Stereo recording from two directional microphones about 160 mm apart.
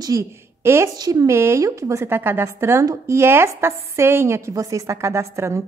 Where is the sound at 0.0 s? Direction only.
20° right (ahead or behind).